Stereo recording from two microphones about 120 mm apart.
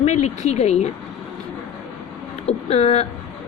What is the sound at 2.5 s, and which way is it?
Speech, 60° left (ahead or behind).